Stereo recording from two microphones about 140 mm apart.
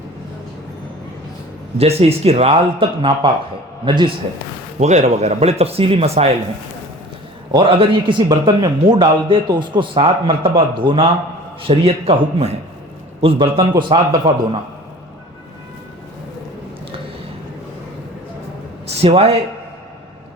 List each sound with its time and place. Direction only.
1.8 s a man's voice: 45° right (ahead or behind)
4.8 s speech: 55° right (ahead or behind)
7.5 s a man's voice: 40° right (ahead or behind)
18.9 s speech: 45° right (ahead or behind)